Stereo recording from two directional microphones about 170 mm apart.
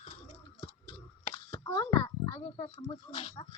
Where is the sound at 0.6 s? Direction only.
30° left (ahead or behind).